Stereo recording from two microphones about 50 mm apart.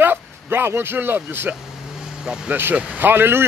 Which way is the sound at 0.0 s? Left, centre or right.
Right.